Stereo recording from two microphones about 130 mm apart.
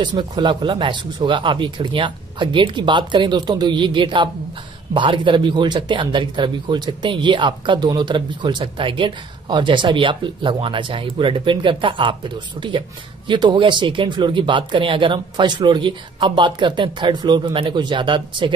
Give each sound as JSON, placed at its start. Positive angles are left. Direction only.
{"t": 0.0, "sound": "speech", "side_deg": -35}